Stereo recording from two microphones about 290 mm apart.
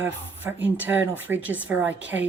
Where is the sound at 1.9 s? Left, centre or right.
Right.